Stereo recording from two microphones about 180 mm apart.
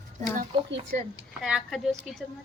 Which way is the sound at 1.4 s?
Centre (ahead or behind).